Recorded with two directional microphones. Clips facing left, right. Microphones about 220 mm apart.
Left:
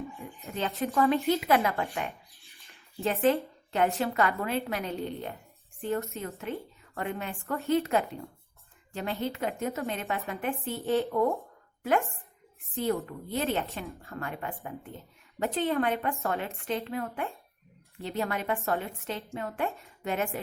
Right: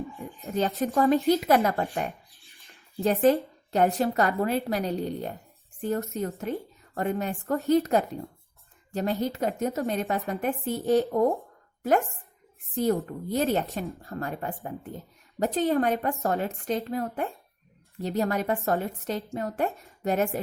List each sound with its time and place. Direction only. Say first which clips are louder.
0.4 s a woman's voice: right 5 dB; 40° right (ahead or behind)